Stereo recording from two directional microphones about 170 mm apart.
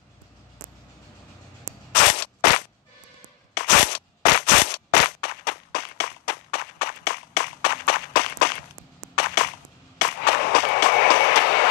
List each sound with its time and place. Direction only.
2.0 s gunshot: 70° left (ahead or behind)
3.5 s a sound: 75° left (ahead or behind)
9.9 s train: 70° left (ahead or behind)